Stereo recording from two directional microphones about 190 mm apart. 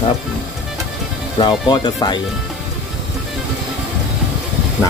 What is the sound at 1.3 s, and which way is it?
Speech, 20° left (ahead or behind).